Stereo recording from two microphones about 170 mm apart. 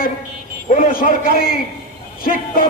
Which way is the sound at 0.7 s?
50° left (ahead or behind).